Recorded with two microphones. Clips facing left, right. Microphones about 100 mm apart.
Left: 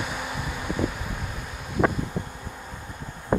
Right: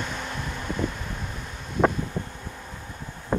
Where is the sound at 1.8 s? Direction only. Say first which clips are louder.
Right 1 dB; 5° left (ahead or behind).